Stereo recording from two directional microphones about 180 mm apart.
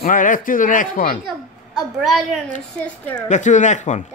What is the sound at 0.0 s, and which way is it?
Speech, 50° left (ahead or behind).